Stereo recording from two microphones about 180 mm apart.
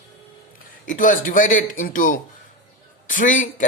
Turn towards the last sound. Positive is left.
turn(degrees=45)  # may be behind; listen again after turning